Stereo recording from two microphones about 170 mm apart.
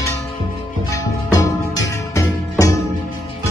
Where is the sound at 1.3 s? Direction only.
20° left (ahead or behind).